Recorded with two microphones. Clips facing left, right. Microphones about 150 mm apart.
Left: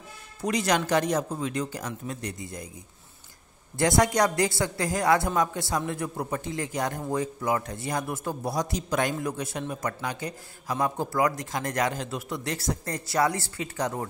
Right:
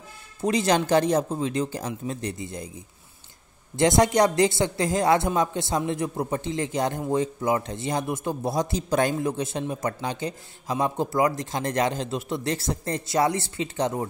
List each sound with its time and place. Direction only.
0.4 s a woman's voice: 25° right (ahead or behind)
3.7 s a woman's voice: 25° right (ahead or behind)